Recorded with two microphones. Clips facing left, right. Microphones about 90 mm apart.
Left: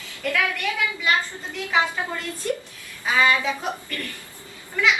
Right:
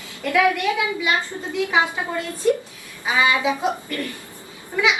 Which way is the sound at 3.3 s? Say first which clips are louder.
Right 3 dB; 15° right (ahead or behind).